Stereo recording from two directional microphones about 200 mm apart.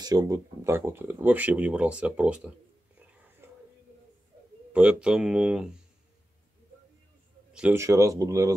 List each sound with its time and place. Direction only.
0.0 s speech: 20° right (ahead or behind)
3.4 s a sound: 10° right (ahead or behind)
4.7 s speech: 5° right (ahead or behind)
7.5 s speech: 10° right (ahead or behind)